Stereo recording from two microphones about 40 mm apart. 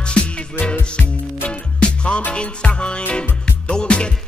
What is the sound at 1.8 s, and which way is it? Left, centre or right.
Music, left.